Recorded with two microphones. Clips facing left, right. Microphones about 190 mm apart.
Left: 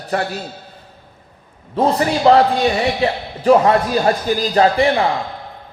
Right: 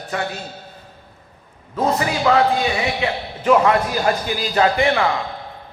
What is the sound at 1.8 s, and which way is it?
A man's voice, 30° left (ahead or behind).